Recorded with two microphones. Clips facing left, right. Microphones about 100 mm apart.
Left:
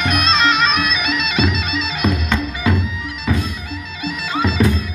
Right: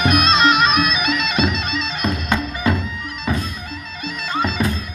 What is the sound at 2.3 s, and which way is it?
Music, 45° right (ahead or behind).